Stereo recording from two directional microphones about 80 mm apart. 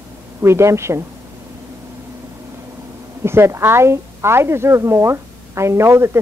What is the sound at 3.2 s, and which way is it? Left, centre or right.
A woman's voice, right.